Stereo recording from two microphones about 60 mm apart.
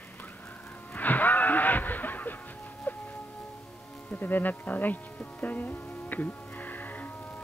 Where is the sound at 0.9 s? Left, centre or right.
Left.